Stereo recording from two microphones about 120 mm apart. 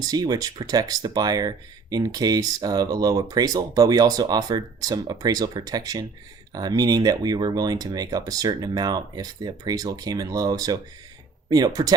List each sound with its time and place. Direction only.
0.0 s speech: 30° right (ahead or behind)